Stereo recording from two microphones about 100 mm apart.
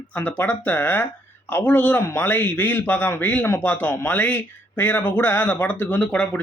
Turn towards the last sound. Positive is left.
turn(degrees=10)  # may be behind; listen again after turning